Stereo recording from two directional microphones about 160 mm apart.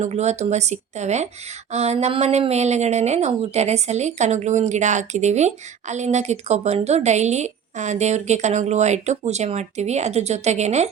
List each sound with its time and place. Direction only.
0.0 s speech: 45° right (ahead or behind)